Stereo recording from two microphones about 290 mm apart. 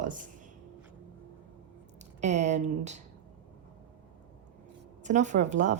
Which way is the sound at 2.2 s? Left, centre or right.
Right.